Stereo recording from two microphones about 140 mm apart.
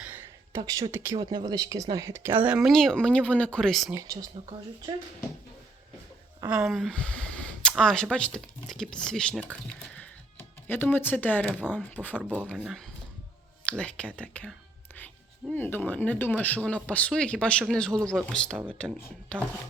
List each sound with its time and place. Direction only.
0.0 s a sound: 15° right (ahead or behind)
0.6 s speech: 25° right (ahead or behind)
1.2 s speech: 30° right (ahead or behind); by 3.9 s centre (ahead or behind)
4.4 s speech: 45° right (ahead or behind)
6.5 s speech: 5° right (ahead or behind)
7.3 s a sound: 10° left (ahead or behind)
7.7 s speech: 5° left (ahead or behind)
12.5 s speech: centre (ahead or behind)
15.5 s speech: 15° left (ahead or behind)